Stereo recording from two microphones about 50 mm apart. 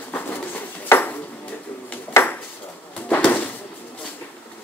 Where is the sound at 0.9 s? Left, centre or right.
Left.